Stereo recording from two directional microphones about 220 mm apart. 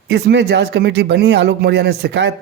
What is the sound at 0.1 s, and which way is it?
A man's voice, 50° right (ahead or behind).